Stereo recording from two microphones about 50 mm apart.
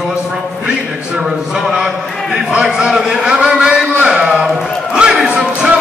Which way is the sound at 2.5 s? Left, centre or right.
Centre.